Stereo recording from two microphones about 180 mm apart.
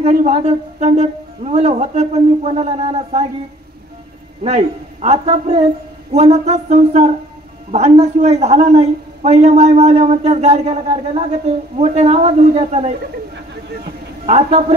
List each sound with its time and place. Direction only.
0.0 s a woman's voice: 35° right (ahead or behind)
4.4 s a woman's voice: 35° right (ahead or behind)
14.2 s a woman's voice: 35° right (ahead or behind)